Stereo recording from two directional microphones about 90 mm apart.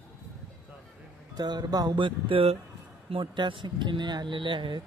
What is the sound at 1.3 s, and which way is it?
Speech, 50° right (ahead or behind).